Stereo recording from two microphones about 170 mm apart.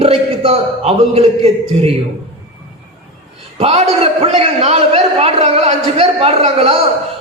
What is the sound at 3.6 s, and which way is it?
A man's voice, 35° right (ahead or behind).